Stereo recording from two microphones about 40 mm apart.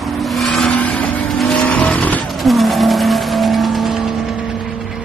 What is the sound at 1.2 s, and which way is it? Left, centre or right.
Vehicle, centre.